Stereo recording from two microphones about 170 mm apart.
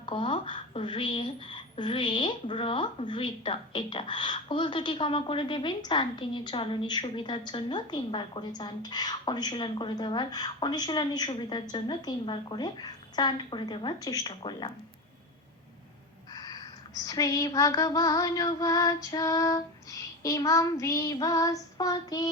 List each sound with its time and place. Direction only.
0.0 s a woman's voice: 30° left (ahead or behind)
16.3 s a sound: 25° left (ahead or behind)
17.0 s a woman's voice: 20° left (ahead or behind)